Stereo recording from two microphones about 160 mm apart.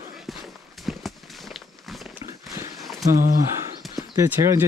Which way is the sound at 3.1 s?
55° right (ahead or behind).